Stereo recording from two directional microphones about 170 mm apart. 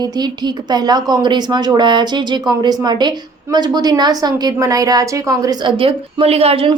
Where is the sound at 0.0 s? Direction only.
25° right (ahead or behind).